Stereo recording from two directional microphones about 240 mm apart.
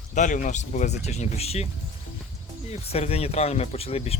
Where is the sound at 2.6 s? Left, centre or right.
Left.